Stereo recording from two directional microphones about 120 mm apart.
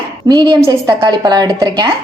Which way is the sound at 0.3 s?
40° right (ahead or behind).